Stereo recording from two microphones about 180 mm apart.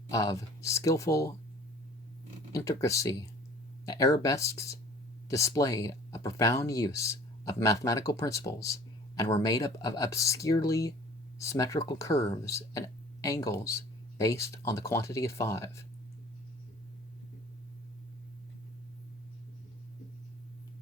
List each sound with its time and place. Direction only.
0.1 s speech: 15° left (ahead or behind)
2.5 s speech: 15° left (ahead or behind)